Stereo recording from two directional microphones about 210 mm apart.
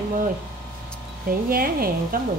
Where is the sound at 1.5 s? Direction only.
45° right (ahead or behind).